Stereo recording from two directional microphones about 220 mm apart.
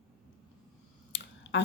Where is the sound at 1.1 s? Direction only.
55° left (ahead or behind).